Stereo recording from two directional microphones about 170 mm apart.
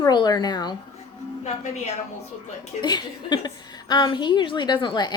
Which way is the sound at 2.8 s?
25° left (ahead or behind).